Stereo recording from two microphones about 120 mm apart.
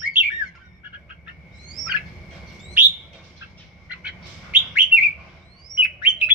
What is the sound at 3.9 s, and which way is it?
Bird, 10° right (ahead or behind).